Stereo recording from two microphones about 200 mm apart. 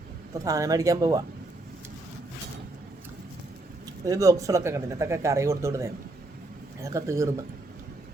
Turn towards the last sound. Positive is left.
turn(degrees=-15)  # may be behind; listen again after turning